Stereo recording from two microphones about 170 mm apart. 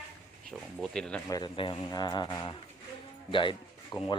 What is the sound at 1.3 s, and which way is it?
Speech, 25° left (ahead or behind).